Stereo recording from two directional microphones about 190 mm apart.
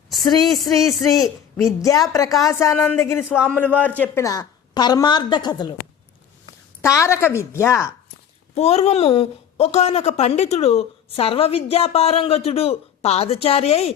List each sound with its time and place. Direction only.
0.1 s speech: centre (ahead or behind)
1.8 s a woman's voice: 20° left (ahead or behind)
6.8 s a woman's voice: 15° left (ahead or behind)
8.5 s a woman's voice: 35° left (ahead or behind)